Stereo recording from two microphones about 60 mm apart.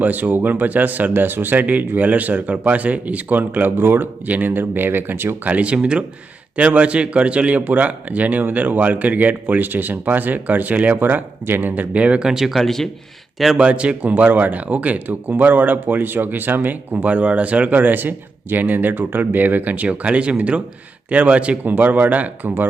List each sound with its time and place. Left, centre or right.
0.0 s a man's voice: right
5.5 s speech: centre
12.3 s speech: centre
13.6 s speech: centre